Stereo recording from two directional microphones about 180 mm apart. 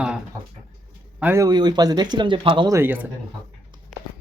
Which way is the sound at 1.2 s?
10° right (ahead or behind).